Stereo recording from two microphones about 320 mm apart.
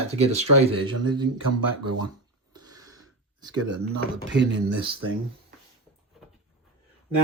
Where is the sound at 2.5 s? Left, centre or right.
Centre.